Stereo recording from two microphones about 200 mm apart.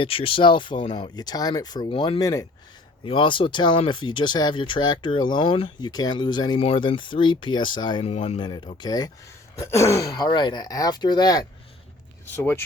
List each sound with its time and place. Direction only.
0.0 s speech: 25° left (ahead or behind); by 12.6 s 10° left (ahead or behind)